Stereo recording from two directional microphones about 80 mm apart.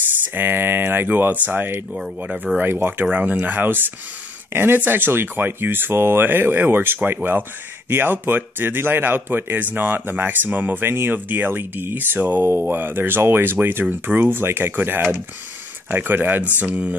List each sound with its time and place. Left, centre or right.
0.3 s speech: right